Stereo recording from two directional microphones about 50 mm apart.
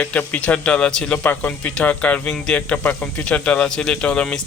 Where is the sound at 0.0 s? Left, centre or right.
Left.